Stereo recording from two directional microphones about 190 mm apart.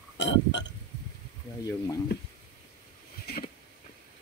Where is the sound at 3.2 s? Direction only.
55° left (ahead or behind).